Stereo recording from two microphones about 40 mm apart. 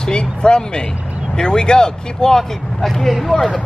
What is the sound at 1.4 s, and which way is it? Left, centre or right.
Speech, left.